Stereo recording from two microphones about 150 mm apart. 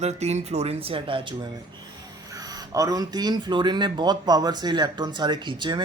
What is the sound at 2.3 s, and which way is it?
Speech, 25° right (ahead or behind).